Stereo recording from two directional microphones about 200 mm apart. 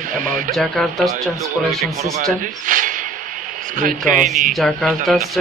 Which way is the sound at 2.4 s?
40° right (ahead or behind).